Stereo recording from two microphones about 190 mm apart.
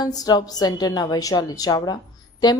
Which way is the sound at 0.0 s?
20° left (ahead or behind).